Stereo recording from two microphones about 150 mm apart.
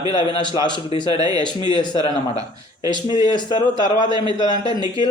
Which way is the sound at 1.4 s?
30° right (ahead or behind).